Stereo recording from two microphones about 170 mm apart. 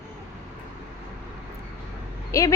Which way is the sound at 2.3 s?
20° left (ahead or behind).